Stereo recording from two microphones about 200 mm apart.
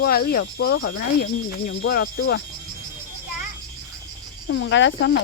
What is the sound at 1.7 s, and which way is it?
Speech, 75° left (ahead or behind).